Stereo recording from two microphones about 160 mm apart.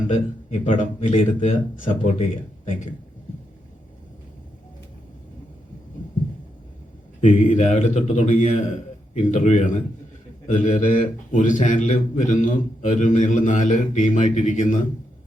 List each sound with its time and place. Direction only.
0.1 s a man's voice: 50° left (ahead or behind)
7.2 s a man's voice: 50° left (ahead or behind)